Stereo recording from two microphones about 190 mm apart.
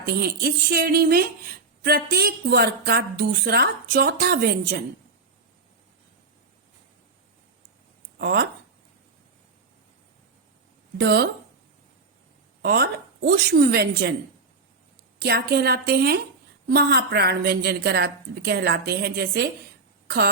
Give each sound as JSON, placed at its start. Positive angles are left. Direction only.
{"t": 0.0, "sound": "a woman's voice", "side_deg": -55}
{"t": 8.2, "sound": "speech", "side_deg": -55}
{"t": 10.9, "sound": "a woman's voice", "side_deg": -55}
{"t": 12.6, "sound": "a woman's voice", "side_deg": -55}
{"t": 15.2, "sound": "a woman's voice", "side_deg": -55}